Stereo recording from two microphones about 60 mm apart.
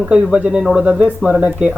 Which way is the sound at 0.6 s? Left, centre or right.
Centre.